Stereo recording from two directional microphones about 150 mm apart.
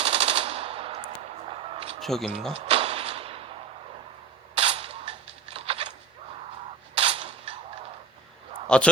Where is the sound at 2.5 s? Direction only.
40° right (ahead or behind).